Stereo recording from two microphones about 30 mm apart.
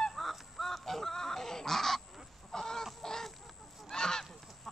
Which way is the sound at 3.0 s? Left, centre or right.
Centre.